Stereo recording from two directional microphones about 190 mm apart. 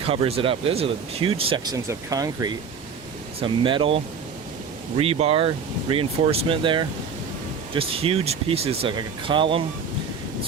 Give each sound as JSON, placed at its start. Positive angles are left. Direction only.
{"t": 0.0, "sound": "speech", "side_deg": -30}
{"t": 1.7, "sound": "speech", "side_deg": -20}